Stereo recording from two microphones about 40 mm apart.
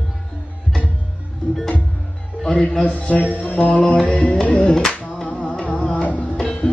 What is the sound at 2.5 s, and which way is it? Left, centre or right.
Music, left.